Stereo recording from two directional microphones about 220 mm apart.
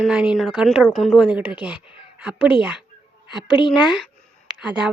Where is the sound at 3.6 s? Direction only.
20° left (ahead or behind).